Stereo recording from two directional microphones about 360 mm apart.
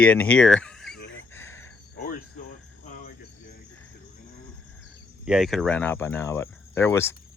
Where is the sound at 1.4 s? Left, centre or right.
Centre.